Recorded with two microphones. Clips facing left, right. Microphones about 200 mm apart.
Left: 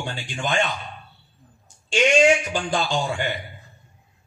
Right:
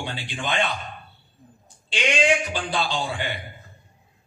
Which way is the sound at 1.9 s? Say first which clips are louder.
Left 5 dB; 45° left (ahead or behind).